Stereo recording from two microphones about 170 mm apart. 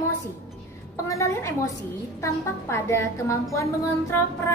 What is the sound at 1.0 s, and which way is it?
A woman's voice, 20° left (ahead or behind).